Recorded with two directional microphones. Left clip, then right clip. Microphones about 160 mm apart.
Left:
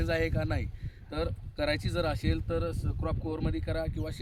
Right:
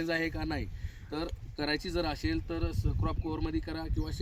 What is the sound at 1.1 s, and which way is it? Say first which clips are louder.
Speech: left 3 dB; 40° left (ahead or behind).